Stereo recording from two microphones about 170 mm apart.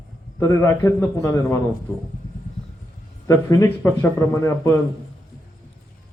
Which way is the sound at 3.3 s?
15° left (ahead or behind).